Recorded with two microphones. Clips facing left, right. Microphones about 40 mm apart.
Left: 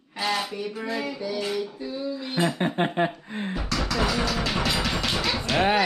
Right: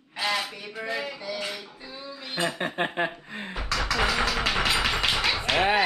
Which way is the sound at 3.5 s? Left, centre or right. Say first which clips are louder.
Right 1 dB; centre.